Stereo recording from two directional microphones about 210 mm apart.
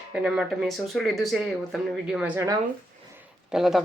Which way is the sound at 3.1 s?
Centre (ahead or behind).